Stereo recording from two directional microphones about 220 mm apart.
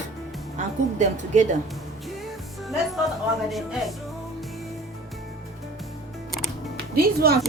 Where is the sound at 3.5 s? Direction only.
Centre (ahead or behind).